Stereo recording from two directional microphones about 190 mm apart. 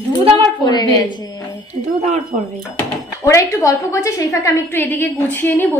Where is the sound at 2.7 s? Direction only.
15° left (ahead or behind).